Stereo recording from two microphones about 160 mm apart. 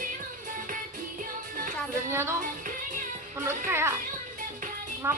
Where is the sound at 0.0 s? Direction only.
55° right (ahead or behind).